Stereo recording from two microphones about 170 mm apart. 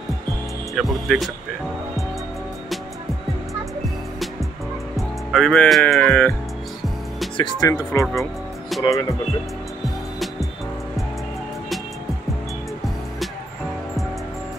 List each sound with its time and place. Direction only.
0.7 s speech: centre (ahead or behind)
4.9 s speech: centre (ahead or behind)
7.3 s speech: 25° left (ahead or behind)
8.2 s music: centre (ahead or behind)